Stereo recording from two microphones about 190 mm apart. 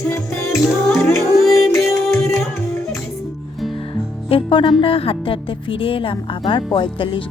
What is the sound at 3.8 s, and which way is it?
Music, 25° left (ahead or behind).